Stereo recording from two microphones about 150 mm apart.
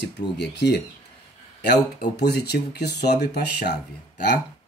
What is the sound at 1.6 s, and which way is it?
Speech, 90° left.